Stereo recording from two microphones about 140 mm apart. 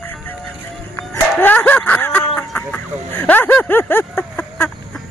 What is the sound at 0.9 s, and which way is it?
Music, 15° left (ahead or behind).